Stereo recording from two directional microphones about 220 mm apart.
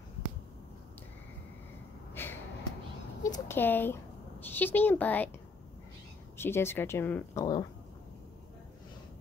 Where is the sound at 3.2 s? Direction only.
15° left (ahead or behind).